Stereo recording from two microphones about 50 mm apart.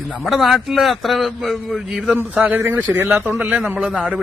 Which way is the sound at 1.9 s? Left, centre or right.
Centre.